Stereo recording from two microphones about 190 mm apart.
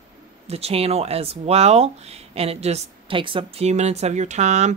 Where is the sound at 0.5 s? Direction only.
30° right (ahead or behind).